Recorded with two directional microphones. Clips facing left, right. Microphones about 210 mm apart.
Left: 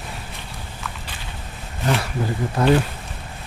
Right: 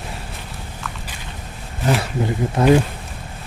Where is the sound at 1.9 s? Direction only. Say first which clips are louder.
Right 3 dB; 20° right (ahead or behind).